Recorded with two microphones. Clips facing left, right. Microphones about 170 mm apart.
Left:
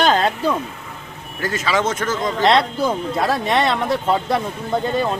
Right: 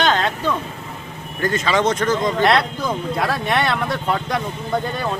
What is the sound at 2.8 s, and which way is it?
Speech, 25° left (ahead or behind).